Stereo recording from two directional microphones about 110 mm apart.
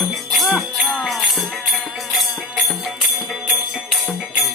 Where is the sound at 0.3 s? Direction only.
Centre (ahead or behind).